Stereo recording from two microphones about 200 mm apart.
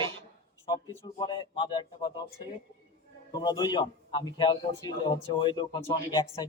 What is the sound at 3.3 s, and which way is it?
A man's voice, 20° left (ahead or behind).